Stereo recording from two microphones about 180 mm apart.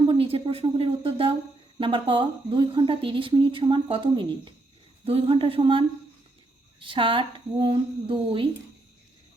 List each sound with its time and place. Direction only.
0.1 s a woman's voice: 30° right (ahead or behind)